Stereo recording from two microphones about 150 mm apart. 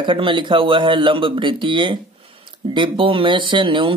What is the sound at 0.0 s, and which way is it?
A man's voice, 35° right (ahead or behind).